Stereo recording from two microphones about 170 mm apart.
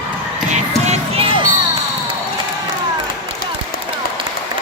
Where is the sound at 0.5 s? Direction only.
40° right (ahead or behind).